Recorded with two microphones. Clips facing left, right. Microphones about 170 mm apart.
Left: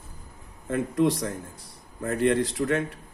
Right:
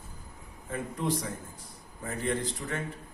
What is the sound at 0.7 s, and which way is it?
A man's voice, 75° left (ahead or behind).